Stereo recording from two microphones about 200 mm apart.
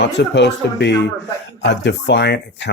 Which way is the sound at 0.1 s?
60° left (ahead or behind).